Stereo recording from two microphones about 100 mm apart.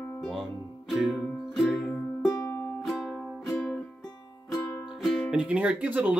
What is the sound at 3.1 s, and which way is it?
Music, 5° left (ahead or behind).